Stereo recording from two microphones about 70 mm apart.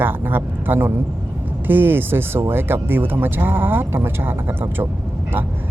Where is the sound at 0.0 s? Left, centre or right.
Right.